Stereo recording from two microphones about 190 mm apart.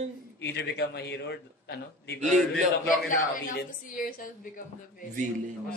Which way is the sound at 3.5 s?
50° left (ahead or behind).